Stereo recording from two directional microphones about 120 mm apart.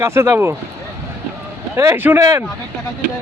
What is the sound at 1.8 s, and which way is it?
Speech, 20° right (ahead or behind).